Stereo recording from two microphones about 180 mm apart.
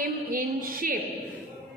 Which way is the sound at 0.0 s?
50° right (ahead or behind).